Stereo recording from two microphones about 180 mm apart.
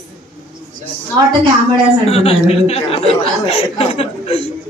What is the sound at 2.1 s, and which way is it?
Speech, 35° left (ahead or behind).